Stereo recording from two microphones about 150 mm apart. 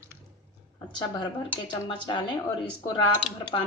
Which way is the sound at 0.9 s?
35° left (ahead or behind).